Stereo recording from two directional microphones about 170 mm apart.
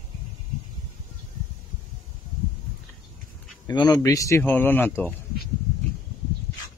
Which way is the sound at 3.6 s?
20° left (ahead or behind).